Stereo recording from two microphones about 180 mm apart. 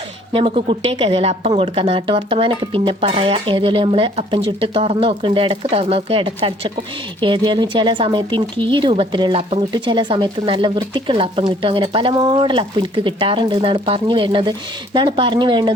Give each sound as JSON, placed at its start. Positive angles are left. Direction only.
{"t": 0.3, "sound": "speech", "side_deg": -30}